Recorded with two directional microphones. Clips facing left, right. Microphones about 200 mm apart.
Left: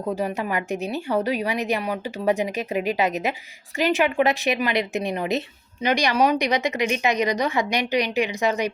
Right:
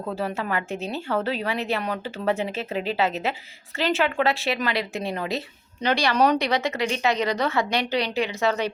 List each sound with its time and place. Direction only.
0.0 s a woman's voice: 15° left (ahead or behind)